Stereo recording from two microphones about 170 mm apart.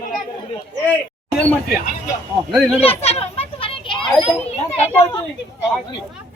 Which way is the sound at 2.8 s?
35° left (ahead or behind).